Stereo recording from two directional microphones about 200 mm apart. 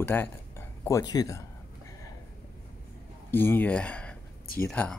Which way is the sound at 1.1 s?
20° left (ahead or behind).